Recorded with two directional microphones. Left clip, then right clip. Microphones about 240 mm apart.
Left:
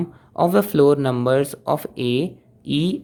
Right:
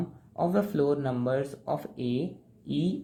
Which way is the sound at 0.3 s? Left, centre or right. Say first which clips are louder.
Left 10 dB; left.